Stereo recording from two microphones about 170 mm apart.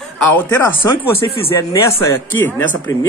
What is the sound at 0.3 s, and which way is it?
Speech, 10° left (ahead or behind).